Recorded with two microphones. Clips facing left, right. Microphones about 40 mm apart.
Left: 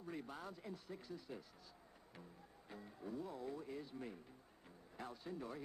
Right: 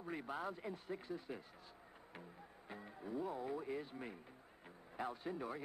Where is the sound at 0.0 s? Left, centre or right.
Right.